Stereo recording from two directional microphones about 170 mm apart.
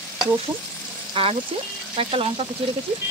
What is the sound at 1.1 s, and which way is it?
Frying, 35° right (ahead or behind).